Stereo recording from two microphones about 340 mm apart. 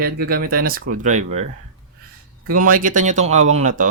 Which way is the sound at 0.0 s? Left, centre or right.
Right.